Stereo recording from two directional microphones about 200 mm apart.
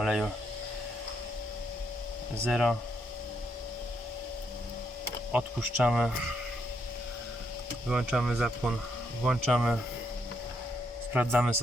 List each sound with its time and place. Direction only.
0.0 s speech: centre (ahead or behind)
2.4 s speech: centre (ahead or behind)
5.3 s speech: 5° right (ahead or behind)
7.9 s speech: centre (ahead or behind)
11.1 s speech: 5° right (ahead or behind)